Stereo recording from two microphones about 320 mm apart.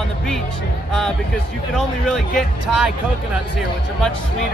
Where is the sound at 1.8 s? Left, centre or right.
Centre.